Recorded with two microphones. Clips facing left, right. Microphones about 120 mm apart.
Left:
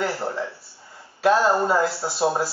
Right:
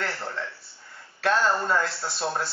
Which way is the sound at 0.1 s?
25° left (ahead or behind).